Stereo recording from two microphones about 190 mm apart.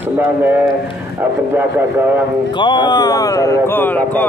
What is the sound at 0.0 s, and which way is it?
Speech, 10° right (ahead or behind).